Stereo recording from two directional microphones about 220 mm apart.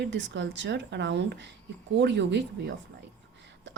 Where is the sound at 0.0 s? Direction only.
55° right (ahead or behind).